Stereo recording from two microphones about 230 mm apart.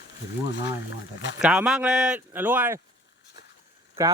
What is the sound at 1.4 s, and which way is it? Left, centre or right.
Speech, centre.